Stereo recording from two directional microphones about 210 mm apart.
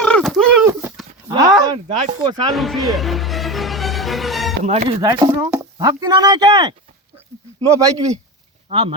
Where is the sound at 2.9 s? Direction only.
Centre (ahead or behind).